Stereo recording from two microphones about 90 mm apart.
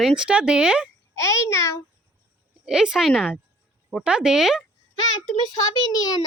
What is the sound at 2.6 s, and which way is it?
Speech, 10° right (ahead or behind).